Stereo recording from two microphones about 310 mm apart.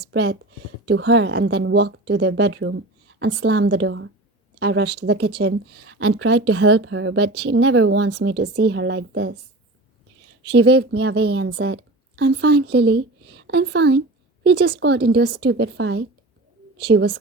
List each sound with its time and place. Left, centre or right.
0.0 s speech: right
10.4 s a woman's voice: right